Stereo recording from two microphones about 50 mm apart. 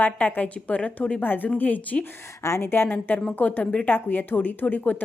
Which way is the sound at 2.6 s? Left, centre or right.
Left.